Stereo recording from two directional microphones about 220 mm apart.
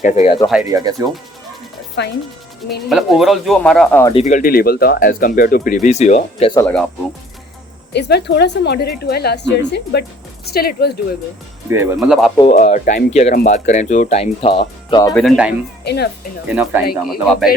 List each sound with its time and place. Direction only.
0.0 s speech: 35° left (ahead or behind)
0.7 s speech: 15° right (ahead or behind)
2.0 s a woman's voice: 50° left (ahead or behind)
2.9 s speech: centre (ahead or behind)
4.1 s speech: 30° left (ahead or behind)
6.5 s speech: 10° left (ahead or behind)
7.9 s a woman's voice: 50° left (ahead or behind)
11.7 s speech: 10° right (ahead or behind)
12.5 s speech: 35° left (ahead or behind)
15.1 s speech: centre (ahead or behind)
15.8 s speech: 50° left (ahead or behind)
16.5 s speech: 5° right (ahead or behind)